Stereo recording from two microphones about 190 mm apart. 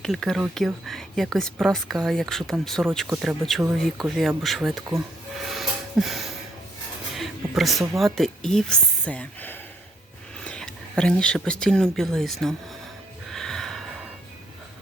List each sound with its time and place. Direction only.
0.0 s speech: 5° left (ahead or behind)
5.5 s a sound: centre (ahead or behind)
7.2 s speech: centre (ahead or behind)
13.3 s gasp: centre (ahead or behind)